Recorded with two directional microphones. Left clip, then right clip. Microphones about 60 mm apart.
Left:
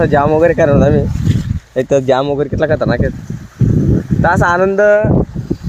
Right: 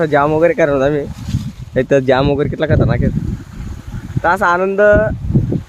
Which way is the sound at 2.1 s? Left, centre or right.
Right.